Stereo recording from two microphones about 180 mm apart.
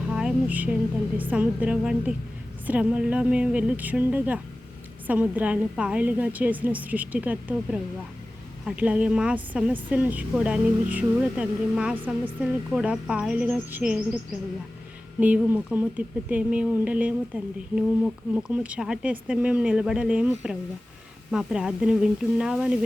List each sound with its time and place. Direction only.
0.1 s a woman's voice: 5° right (ahead or behind)
15.2 s a woman's voice: 10° right (ahead or behind)